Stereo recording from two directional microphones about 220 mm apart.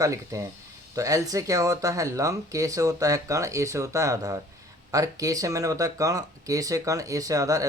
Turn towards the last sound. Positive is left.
turn(degrees=-15)  # may be behind; listen again after turning